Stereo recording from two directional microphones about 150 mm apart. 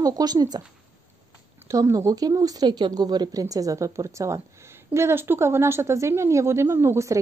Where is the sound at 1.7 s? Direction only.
20° right (ahead or behind).